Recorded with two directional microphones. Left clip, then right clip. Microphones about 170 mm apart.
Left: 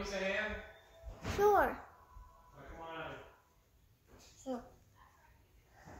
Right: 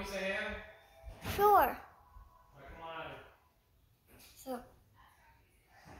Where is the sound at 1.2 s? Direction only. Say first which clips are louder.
Right 3 dB; 20° left (ahead or behind).